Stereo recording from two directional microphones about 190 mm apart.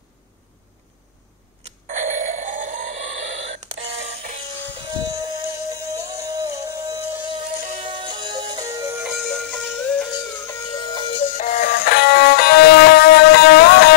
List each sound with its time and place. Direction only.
1.6 s doorbell: 40° right (ahead or behind)
4.9 s music: 20° right (ahead or behind)
9.1 s music: 5° left (ahead or behind); by 11.2 s 25° left (ahead or behind)
11.2 s music: 45° left (ahead or behind)